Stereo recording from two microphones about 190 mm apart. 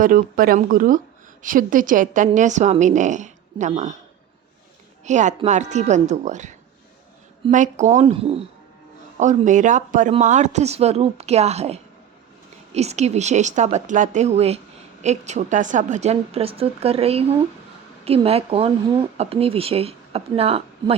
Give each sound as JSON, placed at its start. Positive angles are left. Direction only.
{"t": 0.0, "sound": "speech", "side_deg": -45}
{"t": 5.0, "sound": "speech", "side_deg": -40}